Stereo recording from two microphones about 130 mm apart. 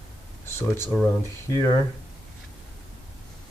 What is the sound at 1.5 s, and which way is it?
Speech, 25° left (ahead or behind).